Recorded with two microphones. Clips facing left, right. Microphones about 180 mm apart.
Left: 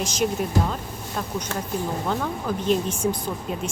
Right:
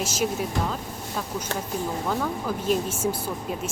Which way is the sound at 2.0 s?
5° right (ahead or behind).